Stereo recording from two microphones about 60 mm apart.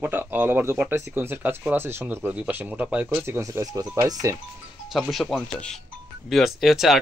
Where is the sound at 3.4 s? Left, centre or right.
Right.